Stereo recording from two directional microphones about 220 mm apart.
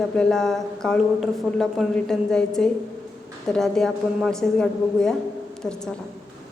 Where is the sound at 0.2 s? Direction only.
Centre (ahead or behind).